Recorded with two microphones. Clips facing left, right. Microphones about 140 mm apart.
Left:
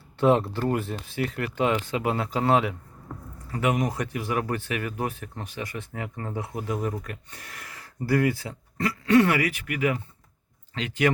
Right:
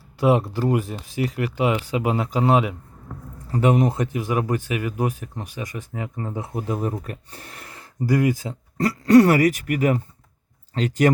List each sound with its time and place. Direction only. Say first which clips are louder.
0.2 s speech: right 2 dB; 10° right (ahead or behind)
3.5 s speech: right 6 dB; 30° right (ahead or behind)
8.0 s speech: right 3 dB; 15° right (ahead or behind)
8.8 s speech: right 6 dB; 40° right (ahead or behind)